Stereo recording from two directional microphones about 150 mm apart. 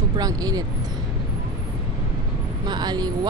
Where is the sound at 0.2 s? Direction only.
25° right (ahead or behind).